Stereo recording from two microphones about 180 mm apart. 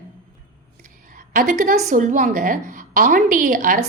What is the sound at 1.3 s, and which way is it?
A woman's voice, 45° right (ahead or behind).